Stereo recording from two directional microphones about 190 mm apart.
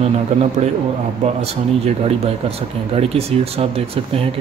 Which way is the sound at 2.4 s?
30° right (ahead or behind).